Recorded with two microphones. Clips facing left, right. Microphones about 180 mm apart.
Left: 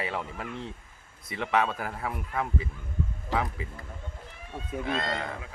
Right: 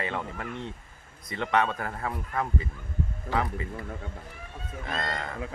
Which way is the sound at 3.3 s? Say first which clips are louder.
Right 1 dB; 90° right.